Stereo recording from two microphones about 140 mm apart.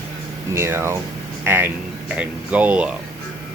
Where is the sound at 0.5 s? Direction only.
20° right (ahead or behind).